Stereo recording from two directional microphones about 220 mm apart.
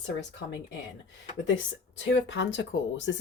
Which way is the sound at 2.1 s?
55° left (ahead or behind).